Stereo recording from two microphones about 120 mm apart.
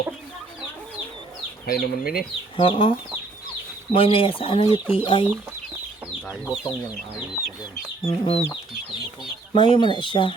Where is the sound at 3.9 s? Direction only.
50° left (ahead or behind).